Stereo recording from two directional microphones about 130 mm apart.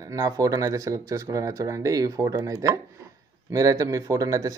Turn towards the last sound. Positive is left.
turn(degrees=-30)  # may be behind; listen again after turning